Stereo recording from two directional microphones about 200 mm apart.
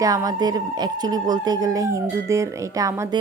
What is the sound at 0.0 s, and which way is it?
Speech, 15° right (ahead or behind).